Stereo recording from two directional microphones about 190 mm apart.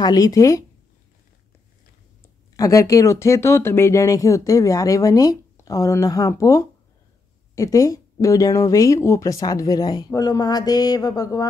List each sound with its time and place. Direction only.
0.0 s speech: 20° left (ahead or behind)
2.2 s speech: 15° left (ahead or behind)